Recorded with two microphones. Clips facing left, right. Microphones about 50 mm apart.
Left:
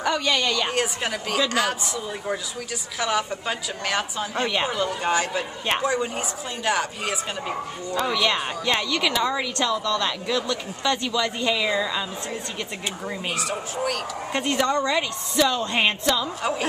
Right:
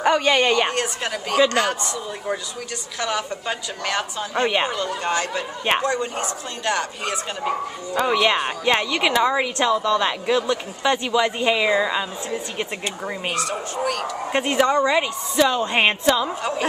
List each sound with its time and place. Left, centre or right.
0.0 s a woman's voice: right
0.7 s a woman's voice: centre
3.0 s a woman's voice: centre
7.4 s speech: centre
13.3 s a woman's voice: centre
14.3 s a woman's voice: centre